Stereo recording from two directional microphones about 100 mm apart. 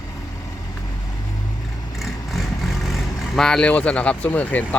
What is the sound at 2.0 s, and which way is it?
Speech, centre (ahead or behind).